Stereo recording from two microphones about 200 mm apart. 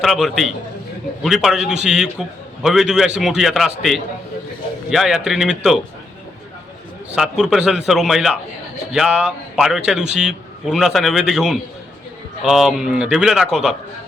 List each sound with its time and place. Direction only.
0.0 s a man's voice: centre (ahead or behind)
7.2 s a man's voice: 5° right (ahead or behind)